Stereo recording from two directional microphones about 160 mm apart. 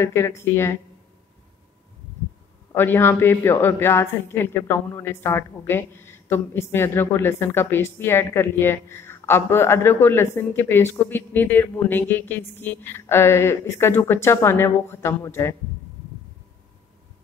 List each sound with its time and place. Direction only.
0.0 s speech: 15° left (ahead or behind)
2.7 s speech: 15° left (ahead or behind)